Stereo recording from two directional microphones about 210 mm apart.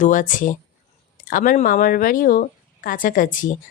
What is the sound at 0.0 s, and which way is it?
Speech, 40° left (ahead or behind).